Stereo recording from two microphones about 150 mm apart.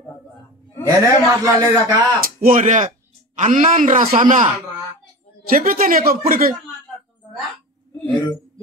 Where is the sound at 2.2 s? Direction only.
70° right (ahead or behind).